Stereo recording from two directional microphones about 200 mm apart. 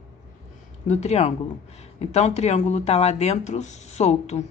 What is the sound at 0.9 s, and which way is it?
Speech, 35° left (ahead or behind).